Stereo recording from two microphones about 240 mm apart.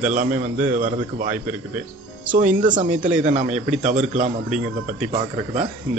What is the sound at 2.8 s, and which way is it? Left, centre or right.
A man's voice, right.